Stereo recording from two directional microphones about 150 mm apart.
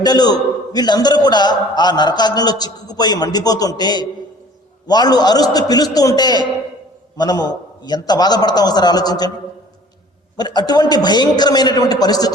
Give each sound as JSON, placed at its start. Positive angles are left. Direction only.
{"t": 0.0, "sound": "a man's voice", "side_deg": 25}
{"t": 10.3, "sound": "a man's voice", "side_deg": 25}